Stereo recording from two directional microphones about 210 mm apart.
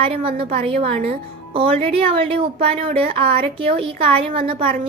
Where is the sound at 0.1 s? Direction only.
25° right (ahead or behind).